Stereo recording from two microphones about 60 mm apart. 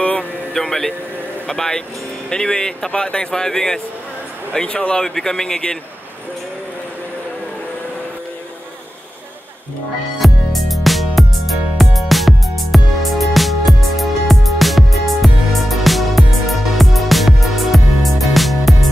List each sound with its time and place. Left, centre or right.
0.0 s a sound: left
0.5 s speech: centre
10.1 s music: centre